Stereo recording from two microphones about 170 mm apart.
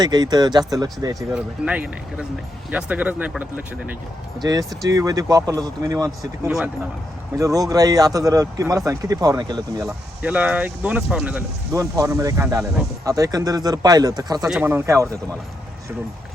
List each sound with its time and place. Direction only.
0.0 s speech: 25° right (ahead or behind)
1.3 s speech: 5° right (ahead or behind)
4.4 s speech: 20° right (ahead or behind)
9.8 s speech: 5° right (ahead or behind)
11.7 s speech: 20° right (ahead or behind)
14.4 s speech: 10° right (ahead or behind)